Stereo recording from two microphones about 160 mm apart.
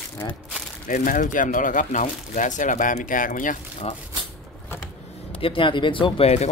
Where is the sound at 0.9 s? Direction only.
55° left (ahead or behind).